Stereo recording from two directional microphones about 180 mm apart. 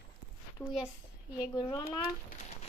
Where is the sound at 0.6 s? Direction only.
20° left (ahead or behind).